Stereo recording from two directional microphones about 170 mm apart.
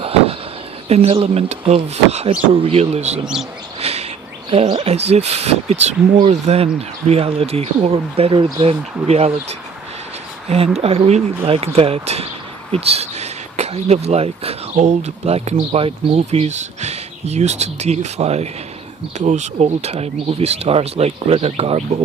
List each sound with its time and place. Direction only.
0.9 s speech: 35° right (ahead or behind)
3.8 s bird: 40° right (ahead or behind)
4.5 s speech: 35° right (ahead or behind)
10.8 s speech: 35° right (ahead or behind)